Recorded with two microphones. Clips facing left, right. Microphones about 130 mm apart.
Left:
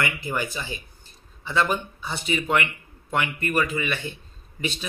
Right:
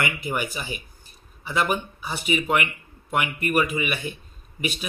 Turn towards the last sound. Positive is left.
turn(degrees=-15)  # may be behind; listen again after turning